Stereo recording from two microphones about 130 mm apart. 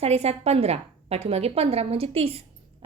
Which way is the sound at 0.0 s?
55° right (ahead or behind).